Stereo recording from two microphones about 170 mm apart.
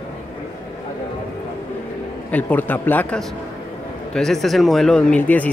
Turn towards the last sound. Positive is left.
turn(degrees=10)  # may be behind; listen again after turning